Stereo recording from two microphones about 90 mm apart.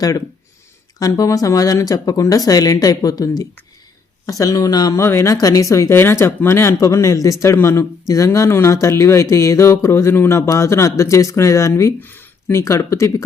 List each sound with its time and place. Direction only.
0.9 s speech: 45° left (ahead or behind)
4.9 s speech: 30° left (ahead or behind)
11.9 s a sound: 20° left (ahead or behind)
12.5 s speech: 35° left (ahead or behind)